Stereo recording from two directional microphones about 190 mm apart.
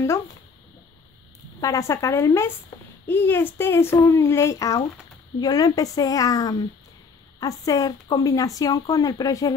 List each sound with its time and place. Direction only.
1.6 s speech: 15° left (ahead or behind)